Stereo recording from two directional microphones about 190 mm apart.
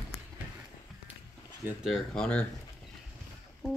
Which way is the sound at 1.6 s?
Centre (ahead or behind).